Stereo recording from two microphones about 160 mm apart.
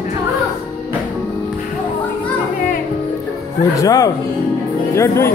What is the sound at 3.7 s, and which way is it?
Speech, 20° left (ahead or behind).